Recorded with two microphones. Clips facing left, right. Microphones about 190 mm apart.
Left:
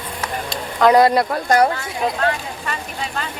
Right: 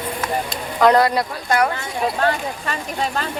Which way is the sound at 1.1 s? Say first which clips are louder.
Left 4 dB; 40° left (ahead or behind).